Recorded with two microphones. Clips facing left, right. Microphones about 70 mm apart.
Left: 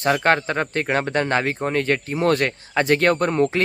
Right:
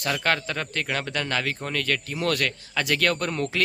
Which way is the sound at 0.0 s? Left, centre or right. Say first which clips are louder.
Left 7 dB; left.